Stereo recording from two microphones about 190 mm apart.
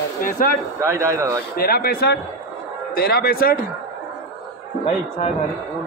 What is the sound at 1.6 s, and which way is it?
Speech, 50° left (ahead or behind).